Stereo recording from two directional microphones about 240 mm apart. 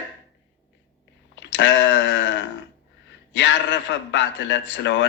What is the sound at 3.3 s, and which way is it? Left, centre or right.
A man's voice, left.